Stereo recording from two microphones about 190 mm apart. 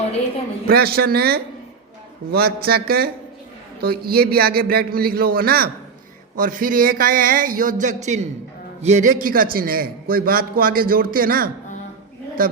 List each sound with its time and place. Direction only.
0.7 s a man's voice: 55° right (ahead or behind)